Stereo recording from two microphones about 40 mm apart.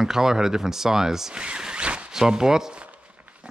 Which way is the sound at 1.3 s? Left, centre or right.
Right.